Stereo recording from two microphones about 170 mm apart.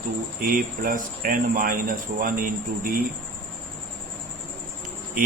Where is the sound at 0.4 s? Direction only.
55° right (ahead or behind).